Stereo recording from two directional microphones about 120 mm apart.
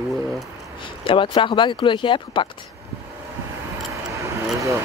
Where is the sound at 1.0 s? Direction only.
45° left (ahead or behind).